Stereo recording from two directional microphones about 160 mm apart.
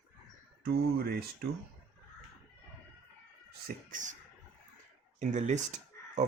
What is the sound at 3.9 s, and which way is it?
Speech, 50° right (ahead or behind).